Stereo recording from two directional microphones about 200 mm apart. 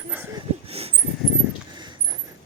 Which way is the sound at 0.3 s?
30° right (ahead or behind).